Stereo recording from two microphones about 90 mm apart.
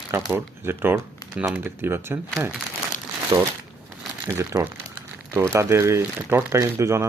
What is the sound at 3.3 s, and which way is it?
Speech, 45° right (ahead or behind).